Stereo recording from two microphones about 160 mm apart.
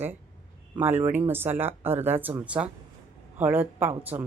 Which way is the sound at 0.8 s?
15° right (ahead or behind).